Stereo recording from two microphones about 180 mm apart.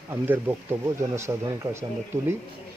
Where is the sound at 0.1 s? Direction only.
10° right (ahead or behind).